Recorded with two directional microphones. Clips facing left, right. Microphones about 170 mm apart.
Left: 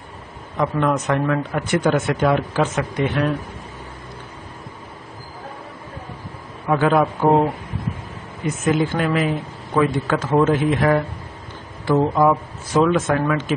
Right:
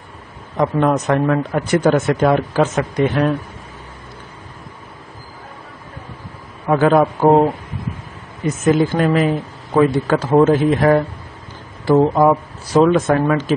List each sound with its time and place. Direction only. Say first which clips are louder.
0.6 s speech: right 4 dB; 40° right (ahead or behind)
6.7 s speech: right 4 dB; 40° right (ahead or behind)
8.5 s speech: right 4 dB; 40° right (ahead or behind)